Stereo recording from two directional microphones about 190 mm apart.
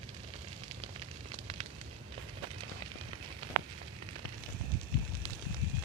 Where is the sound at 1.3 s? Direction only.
35° right (ahead or behind).